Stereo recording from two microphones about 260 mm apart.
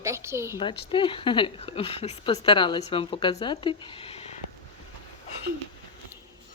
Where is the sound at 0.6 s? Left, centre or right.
Left.